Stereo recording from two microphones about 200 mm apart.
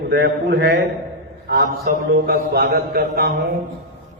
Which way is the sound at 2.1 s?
50° right (ahead or behind).